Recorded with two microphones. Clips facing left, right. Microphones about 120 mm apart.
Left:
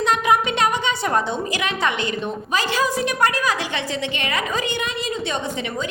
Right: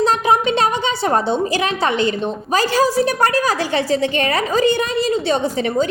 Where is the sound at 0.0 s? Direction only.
35° right (ahead or behind).